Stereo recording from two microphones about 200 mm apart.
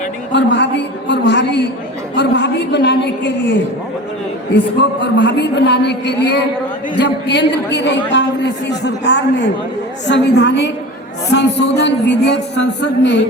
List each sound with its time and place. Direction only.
0.3 s a man's voice: 60° left (ahead or behind)